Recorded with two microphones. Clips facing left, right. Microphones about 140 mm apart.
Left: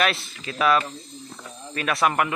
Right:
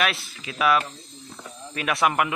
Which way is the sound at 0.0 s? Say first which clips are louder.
Left 2 dB; 10° right (ahead or behind).